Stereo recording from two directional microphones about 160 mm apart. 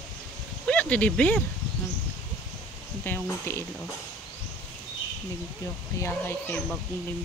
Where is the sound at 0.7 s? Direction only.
10° left (ahead or behind).